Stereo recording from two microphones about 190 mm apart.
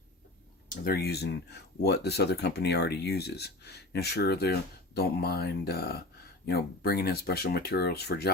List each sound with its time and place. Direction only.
0.7 s speech: 55° left (ahead or behind)